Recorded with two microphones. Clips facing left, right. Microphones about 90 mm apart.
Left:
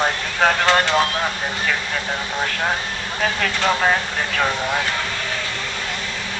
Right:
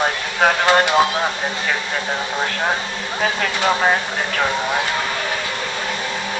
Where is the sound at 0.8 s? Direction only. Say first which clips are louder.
Right 3 dB; 15° right (ahead or behind).